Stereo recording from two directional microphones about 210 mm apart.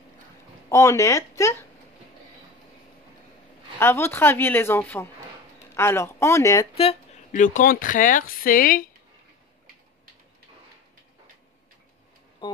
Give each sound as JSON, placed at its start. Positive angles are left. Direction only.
{"t": 0.7, "sound": "a woman's voice", "side_deg": 15}
{"t": 3.8, "sound": "a woman's voice", "side_deg": 10}
{"t": 6.7, "sound": "speech", "side_deg": 30}